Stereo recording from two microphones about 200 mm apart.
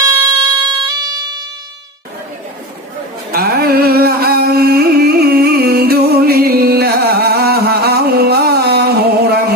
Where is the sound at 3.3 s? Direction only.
50° right (ahead or behind).